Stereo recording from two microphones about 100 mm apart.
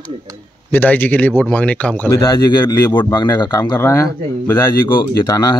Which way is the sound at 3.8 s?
30° left (ahead or behind).